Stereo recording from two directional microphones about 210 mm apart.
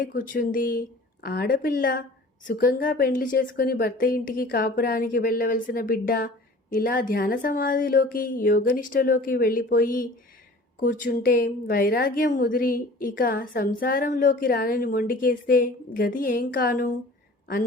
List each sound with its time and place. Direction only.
0.0 s speech: 40° left (ahead or behind)